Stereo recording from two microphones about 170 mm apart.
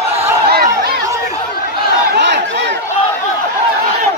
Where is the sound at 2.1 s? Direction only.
90° right.